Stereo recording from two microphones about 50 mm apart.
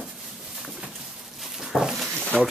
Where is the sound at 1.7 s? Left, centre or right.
Centre.